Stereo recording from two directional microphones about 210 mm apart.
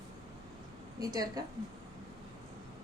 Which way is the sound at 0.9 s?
20° right (ahead or behind).